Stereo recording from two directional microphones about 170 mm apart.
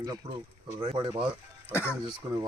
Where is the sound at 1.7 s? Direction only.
15° left (ahead or behind).